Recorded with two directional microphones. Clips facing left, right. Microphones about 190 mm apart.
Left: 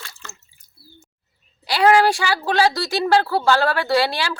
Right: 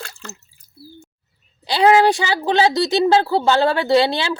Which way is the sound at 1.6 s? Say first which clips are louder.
Right 2 dB; 20° right (ahead or behind).